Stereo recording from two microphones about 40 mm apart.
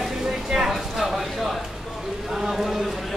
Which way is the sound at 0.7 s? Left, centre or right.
Centre.